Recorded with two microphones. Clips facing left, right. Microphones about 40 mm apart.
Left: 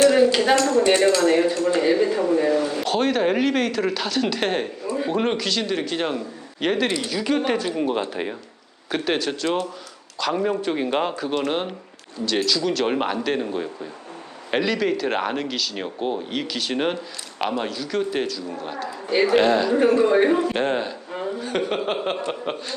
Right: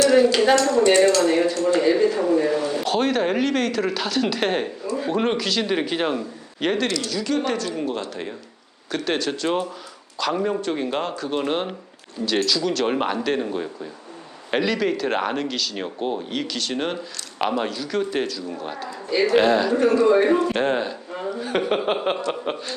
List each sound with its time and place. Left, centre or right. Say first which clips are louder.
0.3 s speech: right 1 dB; centre
2.0 s speech: right 1 dB; centre
5.6 s speech: right 2 dB; centre
6.8 s speech: left 1 dB; left
8.9 s speech: left 1 dB; centre
11.4 s speech: even; centre
17.4 s speech: right 2 dB; centre
19.7 s speech: even; centre
20.2 s speech: even; centre